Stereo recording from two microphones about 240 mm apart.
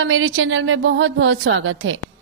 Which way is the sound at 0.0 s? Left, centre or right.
Right.